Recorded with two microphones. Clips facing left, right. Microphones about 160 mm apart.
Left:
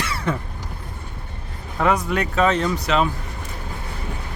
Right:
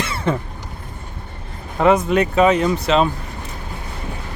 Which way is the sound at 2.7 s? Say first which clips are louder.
Right 4 dB; 25° right (ahead or behind).